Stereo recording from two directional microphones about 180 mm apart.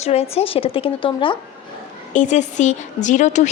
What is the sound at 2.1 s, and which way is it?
A woman's voice, 45° left (ahead or behind).